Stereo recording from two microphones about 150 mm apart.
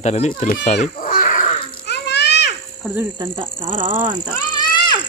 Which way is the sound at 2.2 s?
90° left.